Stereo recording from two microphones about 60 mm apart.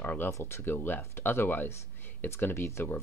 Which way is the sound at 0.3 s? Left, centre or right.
Left.